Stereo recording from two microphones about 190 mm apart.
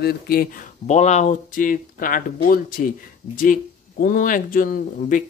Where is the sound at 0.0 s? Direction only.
55° left (ahead or behind).